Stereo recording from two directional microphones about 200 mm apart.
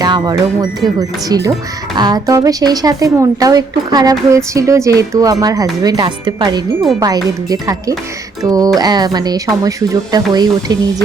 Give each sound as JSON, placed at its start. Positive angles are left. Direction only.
{"t": 0.0, "sound": "music", "side_deg": -20}
{"t": 1.3, "sound": "speech", "side_deg": -15}